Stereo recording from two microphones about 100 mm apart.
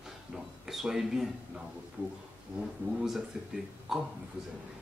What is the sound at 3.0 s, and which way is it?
Speech, 5° right (ahead or behind).